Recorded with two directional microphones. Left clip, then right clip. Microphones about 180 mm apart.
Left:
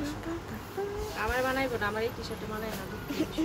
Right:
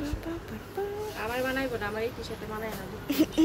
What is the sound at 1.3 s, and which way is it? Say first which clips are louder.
Snake: left 1 dB; 20° right (ahead or behind).